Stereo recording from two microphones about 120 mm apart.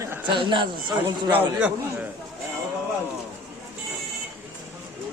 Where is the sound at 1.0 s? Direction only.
15° right (ahead or behind).